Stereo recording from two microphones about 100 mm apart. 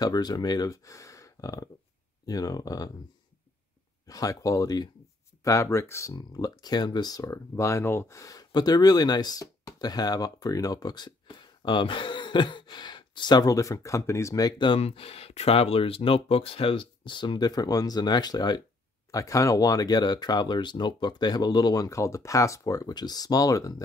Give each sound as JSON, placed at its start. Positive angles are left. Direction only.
{"t": 0.0, "sound": "speech", "side_deg": 40}
{"t": 4.1, "sound": "speech", "side_deg": 35}
{"t": 6.1, "sound": "speech", "side_deg": 40}
{"t": 14.8, "sound": "speech", "side_deg": 85}
{"t": 19.1, "sound": "speech", "side_deg": 30}